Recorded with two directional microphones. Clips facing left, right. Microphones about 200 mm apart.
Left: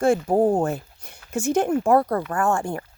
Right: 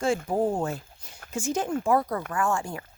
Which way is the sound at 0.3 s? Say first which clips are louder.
Left 6 dB; 50° left (ahead or behind).